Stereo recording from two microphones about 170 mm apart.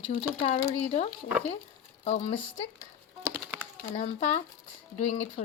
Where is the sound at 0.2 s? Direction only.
35° left (ahead or behind).